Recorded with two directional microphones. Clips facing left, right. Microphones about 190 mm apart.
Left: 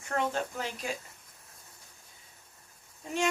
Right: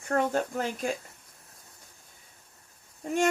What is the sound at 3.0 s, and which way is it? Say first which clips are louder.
Speech: right 5 dB; 50° right (ahead or behind).